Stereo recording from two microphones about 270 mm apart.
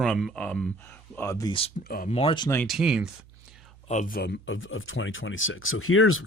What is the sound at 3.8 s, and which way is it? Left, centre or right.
Speech, left.